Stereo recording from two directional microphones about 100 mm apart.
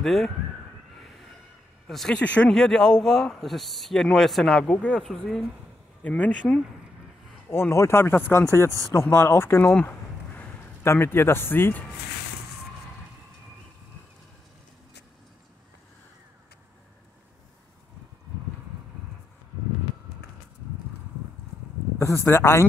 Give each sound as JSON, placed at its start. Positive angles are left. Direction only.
{"t": 0.0, "sound": "speech", "side_deg": 0}
{"t": 1.9, "sound": "speech", "side_deg": 5}
{"t": 6.0, "sound": "speech", "side_deg": 15}
{"t": 7.4, "sound": "speech", "side_deg": 25}
{"t": 9.8, "sound": "a sound", "side_deg": 25}
{"t": 21.9, "sound": "speech", "side_deg": 30}